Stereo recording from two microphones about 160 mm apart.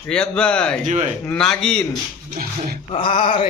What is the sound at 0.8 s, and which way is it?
Speech, 50° right (ahead or behind).